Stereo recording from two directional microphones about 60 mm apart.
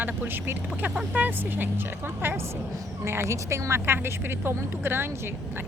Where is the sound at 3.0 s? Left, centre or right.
Right.